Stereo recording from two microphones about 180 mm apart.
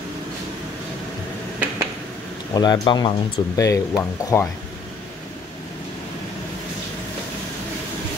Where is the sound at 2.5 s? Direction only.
20° left (ahead or behind).